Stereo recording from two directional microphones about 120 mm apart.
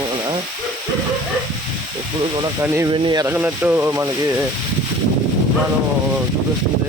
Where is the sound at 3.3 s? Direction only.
15° right (ahead or behind).